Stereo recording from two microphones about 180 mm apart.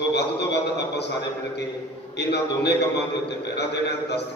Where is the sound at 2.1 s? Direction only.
70° left (ahead or behind).